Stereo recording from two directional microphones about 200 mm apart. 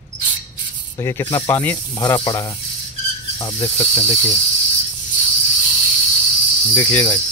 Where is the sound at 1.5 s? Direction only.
10° left (ahead or behind).